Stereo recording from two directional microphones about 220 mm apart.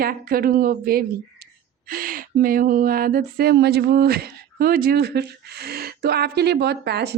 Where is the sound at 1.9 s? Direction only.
40° right (ahead or behind).